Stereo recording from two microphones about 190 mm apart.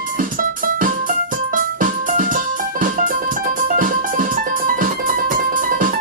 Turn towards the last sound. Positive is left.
turn(degrees=-45)  # may be behind; listen again after turning